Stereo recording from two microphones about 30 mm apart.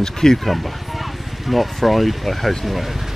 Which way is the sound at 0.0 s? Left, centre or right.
Centre.